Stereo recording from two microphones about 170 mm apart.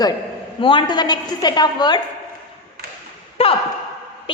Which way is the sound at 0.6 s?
30° left (ahead or behind).